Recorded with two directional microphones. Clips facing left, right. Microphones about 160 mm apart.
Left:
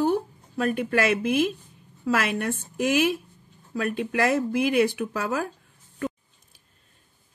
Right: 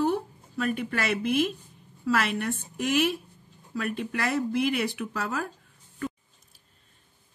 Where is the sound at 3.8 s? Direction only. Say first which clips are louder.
Left 5 dB; 50° left (ahead or behind).